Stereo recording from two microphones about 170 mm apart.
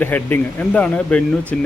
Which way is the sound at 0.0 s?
10° left (ahead or behind).